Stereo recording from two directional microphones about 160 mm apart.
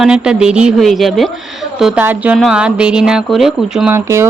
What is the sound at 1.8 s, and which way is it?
Speech, 10° right (ahead or behind).